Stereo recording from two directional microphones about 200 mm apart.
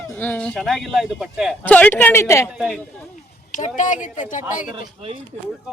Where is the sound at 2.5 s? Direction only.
Centre (ahead or behind).